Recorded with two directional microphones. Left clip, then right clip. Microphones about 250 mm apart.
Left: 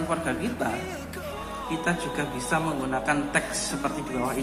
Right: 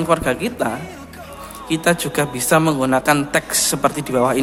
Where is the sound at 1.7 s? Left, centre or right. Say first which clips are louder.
Right 11 dB; right.